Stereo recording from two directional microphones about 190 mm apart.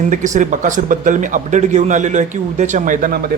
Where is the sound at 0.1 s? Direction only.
40° right (ahead or behind).